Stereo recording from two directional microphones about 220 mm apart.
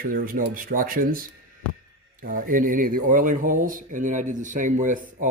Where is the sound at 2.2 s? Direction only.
40° right (ahead or behind).